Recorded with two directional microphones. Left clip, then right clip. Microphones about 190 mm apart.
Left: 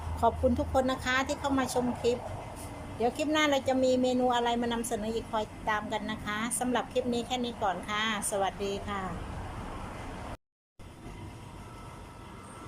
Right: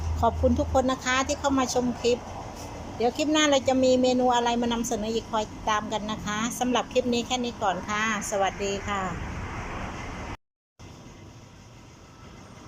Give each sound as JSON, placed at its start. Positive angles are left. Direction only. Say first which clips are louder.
{"t": 0.2, "sound": "speech", "louder": "right 3 dB", "side_deg": 0}